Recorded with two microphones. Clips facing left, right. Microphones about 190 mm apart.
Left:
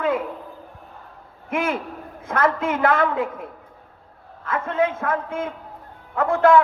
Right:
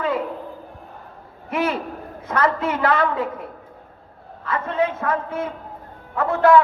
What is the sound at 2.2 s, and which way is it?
A man's voice, 50° left (ahead or behind).